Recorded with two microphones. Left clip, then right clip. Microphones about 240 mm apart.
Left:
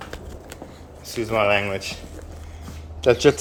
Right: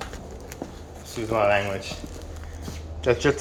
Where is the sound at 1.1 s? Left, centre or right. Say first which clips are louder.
Left 2 dB; centre.